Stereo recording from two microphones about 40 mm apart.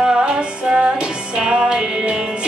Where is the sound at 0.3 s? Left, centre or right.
Centre.